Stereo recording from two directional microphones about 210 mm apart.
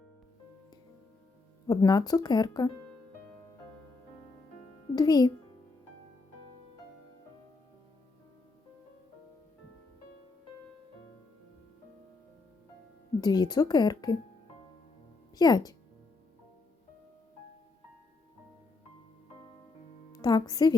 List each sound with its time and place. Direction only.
1.6 s speech: 20° left (ahead or behind)
4.9 s speech: 20° left (ahead or behind)
13.2 s speech: 20° left (ahead or behind)
15.4 s speech: 20° left (ahead or behind)
20.1 s speech: 20° left (ahead or behind)